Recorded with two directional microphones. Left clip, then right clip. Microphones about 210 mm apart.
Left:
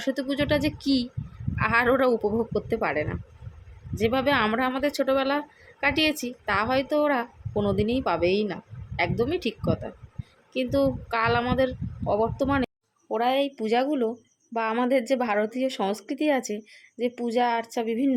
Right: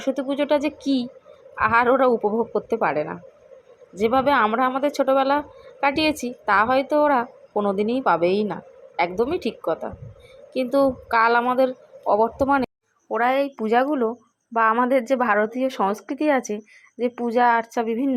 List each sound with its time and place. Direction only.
0.2 s speech: 5° left (ahead or behind)